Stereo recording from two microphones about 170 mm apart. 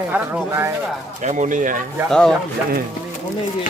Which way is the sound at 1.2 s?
45° right (ahead or behind).